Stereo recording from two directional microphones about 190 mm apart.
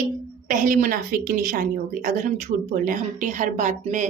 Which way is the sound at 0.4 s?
45° right (ahead or behind).